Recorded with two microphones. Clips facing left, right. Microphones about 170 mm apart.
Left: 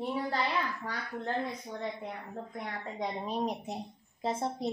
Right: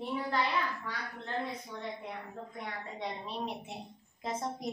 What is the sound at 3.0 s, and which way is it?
Speech, 40° left (ahead or behind).